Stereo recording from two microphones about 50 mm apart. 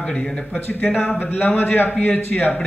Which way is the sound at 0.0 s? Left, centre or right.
Centre.